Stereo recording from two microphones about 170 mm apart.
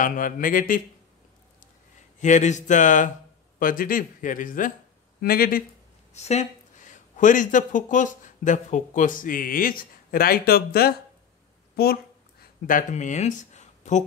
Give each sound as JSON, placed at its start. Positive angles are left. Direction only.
{"t": 0.0, "sound": "speech", "side_deg": 55}
{"t": 2.1, "sound": "speech", "side_deg": 45}
{"t": 6.1, "sound": "speech", "side_deg": 40}
{"t": 11.7, "sound": "a sound", "side_deg": 65}